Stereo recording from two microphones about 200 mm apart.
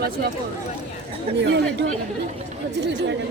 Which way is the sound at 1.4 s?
60° right (ahead or behind).